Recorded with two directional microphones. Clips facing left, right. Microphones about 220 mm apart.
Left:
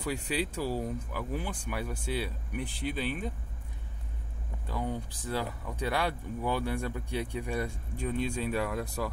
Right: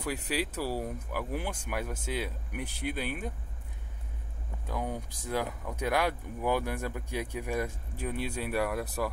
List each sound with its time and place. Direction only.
0.1 s speech: 10° right (ahead or behind)
4.6 s speech: 15° right (ahead or behind)